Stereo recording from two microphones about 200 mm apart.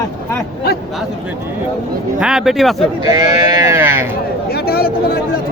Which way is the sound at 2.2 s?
5° right (ahead or behind).